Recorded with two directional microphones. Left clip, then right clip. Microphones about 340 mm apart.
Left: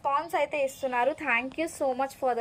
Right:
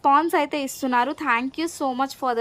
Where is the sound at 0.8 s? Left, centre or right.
Right.